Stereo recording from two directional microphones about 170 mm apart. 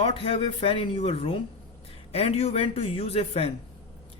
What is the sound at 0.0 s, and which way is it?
Speech, 35° left (ahead or behind).